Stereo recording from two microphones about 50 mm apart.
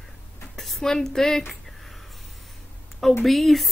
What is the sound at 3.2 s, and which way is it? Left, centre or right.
Speech, centre.